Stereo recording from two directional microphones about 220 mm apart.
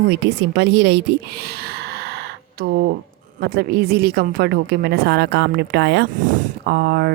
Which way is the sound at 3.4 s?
45° right (ahead or behind).